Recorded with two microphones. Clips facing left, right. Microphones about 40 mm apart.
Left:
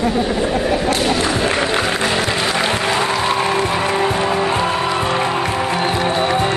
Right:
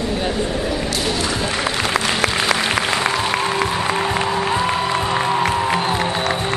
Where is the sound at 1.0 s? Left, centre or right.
Left.